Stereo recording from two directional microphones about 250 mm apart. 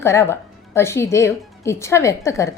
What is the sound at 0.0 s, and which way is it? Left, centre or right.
A woman's voice, centre.